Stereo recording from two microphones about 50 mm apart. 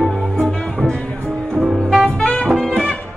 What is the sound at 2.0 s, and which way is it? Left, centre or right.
Music, centre.